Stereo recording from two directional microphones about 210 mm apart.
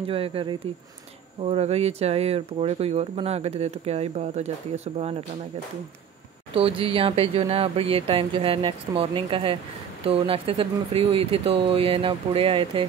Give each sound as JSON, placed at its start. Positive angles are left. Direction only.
{"t": 0.0, "sound": "speech", "side_deg": -25}
{"t": 6.5, "sound": "speech", "side_deg": -25}